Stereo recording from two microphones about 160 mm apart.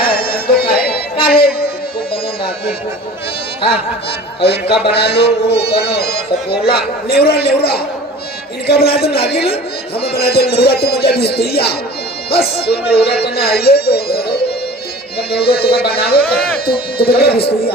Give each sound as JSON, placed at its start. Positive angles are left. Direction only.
{"t": 0.0, "sound": "music", "side_deg": 70}
{"t": 4.8, "sound": "a man's voice", "side_deg": 90}